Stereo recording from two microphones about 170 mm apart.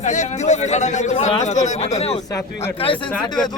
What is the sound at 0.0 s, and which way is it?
A man's voice, 45° left (ahead or behind).